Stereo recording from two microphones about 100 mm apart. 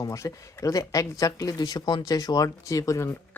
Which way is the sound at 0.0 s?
35° left (ahead or behind).